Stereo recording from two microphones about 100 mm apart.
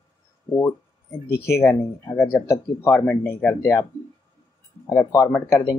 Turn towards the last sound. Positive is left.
turn(degrees=30)  # may be behind; listen again after turning